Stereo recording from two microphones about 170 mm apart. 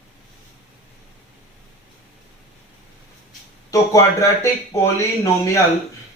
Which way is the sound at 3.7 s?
15° left (ahead or behind).